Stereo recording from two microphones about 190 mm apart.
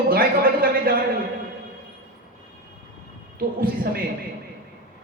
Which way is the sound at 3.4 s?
55° right (ahead or behind).